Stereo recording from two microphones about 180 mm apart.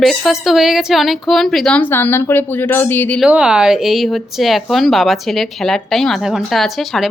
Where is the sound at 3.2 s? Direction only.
5° right (ahead or behind).